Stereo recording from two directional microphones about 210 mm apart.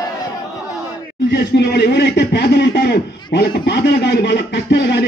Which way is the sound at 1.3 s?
50° left (ahead or behind).